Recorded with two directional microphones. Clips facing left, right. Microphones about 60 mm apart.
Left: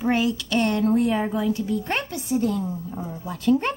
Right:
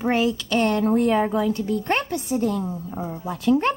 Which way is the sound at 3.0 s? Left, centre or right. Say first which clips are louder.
Right 3 dB; right.